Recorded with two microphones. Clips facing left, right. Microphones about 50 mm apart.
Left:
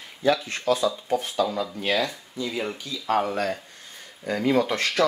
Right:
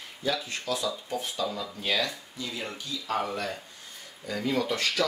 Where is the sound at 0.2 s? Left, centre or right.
Left.